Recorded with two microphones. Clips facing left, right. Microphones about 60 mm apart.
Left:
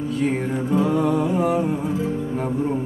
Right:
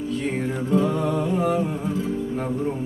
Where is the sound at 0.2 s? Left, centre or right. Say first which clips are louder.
Left 3 dB; centre.